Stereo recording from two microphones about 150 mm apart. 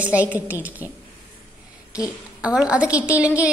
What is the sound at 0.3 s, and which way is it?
Speech, 10° right (ahead or behind).